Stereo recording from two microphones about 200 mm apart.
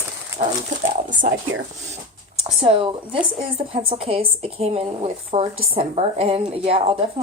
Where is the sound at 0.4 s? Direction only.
35° right (ahead or behind).